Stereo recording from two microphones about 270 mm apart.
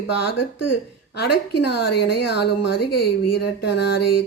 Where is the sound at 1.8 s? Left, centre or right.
Left.